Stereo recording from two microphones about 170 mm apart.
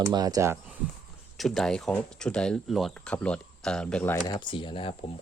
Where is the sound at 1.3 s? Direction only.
Centre (ahead or behind).